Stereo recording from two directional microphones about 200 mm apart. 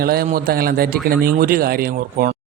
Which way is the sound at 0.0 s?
50° right (ahead or behind).